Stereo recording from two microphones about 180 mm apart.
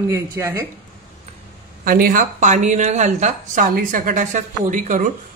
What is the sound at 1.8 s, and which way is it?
A man's voice, 50° right (ahead or behind).